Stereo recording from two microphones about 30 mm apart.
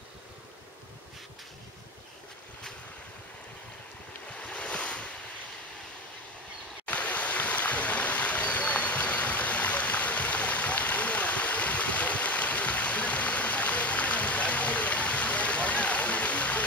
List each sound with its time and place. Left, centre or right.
4.3 s waves: left
6.9 s stream: left